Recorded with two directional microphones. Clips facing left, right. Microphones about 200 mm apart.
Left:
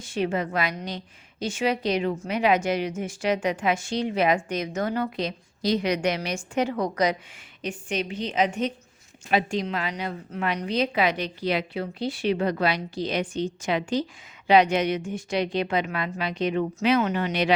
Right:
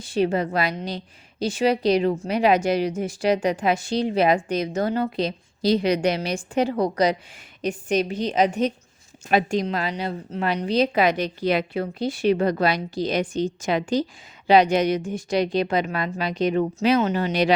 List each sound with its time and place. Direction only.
0.0 s a woman's voice: 35° right (ahead or behind)